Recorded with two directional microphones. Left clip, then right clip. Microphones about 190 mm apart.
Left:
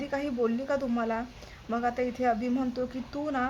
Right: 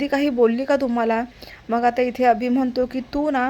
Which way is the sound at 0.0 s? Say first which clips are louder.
Right 11 dB; 35° right (ahead or behind).